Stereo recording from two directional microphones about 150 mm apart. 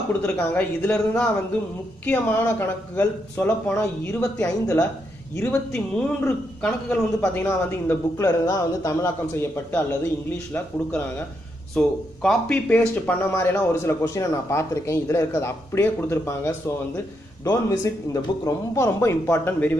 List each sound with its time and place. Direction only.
0.2 s speech: 10° left (ahead or behind)
7.4 s a man's voice: 20° left (ahead or behind)